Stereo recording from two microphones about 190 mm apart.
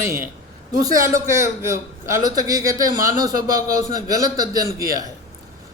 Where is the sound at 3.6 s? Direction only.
20° right (ahead or behind).